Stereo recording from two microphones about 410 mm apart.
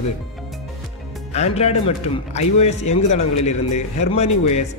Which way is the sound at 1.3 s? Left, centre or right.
Centre.